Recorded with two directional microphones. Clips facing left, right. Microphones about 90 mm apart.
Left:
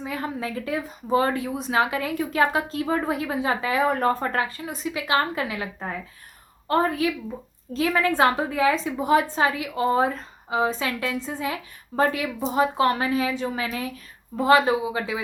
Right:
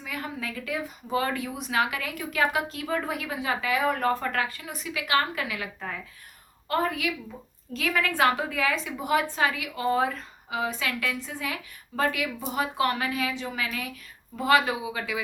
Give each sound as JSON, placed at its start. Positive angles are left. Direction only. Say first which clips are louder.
{"t": 0.0, "sound": "a woman's voice", "louder": "left 5 dB", "side_deg": 30}